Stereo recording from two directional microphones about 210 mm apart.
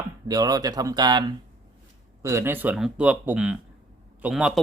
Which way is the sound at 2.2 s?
10° right (ahead or behind).